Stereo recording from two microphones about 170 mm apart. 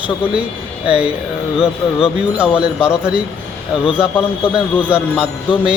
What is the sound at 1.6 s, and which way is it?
Speech, 35° left (ahead or behind).